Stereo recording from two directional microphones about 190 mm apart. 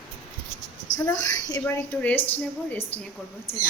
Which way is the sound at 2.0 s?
10° left (ahead or behind).